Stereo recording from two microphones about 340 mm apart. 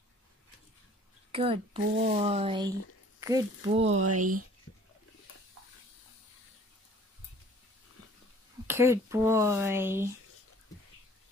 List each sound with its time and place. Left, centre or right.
1.3 s speech: centre
3.9 s speech: right
8.6 s speech: centre